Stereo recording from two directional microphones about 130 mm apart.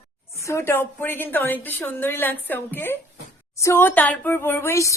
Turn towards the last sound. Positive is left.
turn(degrees=20)  # may be behind; listen again after turning